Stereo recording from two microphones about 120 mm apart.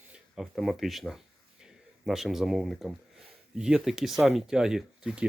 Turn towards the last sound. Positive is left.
turn(degrees=-5)  # may be behind; listen again after turning